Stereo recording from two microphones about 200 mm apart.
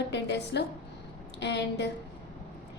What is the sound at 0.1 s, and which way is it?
A woman's voice, 60° left (ahead or behind).